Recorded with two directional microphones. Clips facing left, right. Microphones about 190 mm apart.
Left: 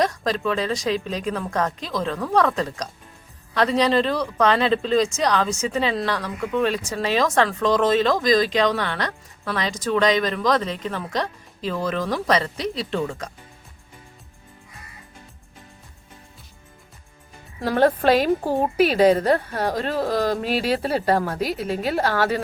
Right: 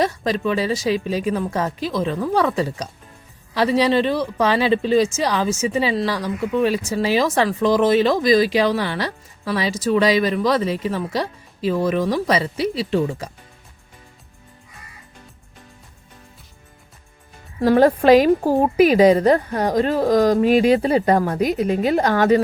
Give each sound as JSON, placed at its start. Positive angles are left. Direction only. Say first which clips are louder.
{"t": 0.0, "sound": "a woman's voice", "louder": "right 2 dB", "side_deg": -5}
{"t": 17.6, "sound": "speech", "louder": "right 5 dB", "side_deg": -10}
{"t": 20.6, "sound": "a woman's voice", "louder": "right 7 dB", "side_deg": 0}
{"t": 22.0, "sound": "speech", "louder": "right 4 dB", "side_deg": -15}